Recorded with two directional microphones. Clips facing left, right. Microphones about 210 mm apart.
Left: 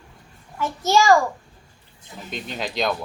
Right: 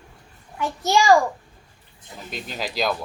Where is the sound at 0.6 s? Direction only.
15° right (ahead or behind).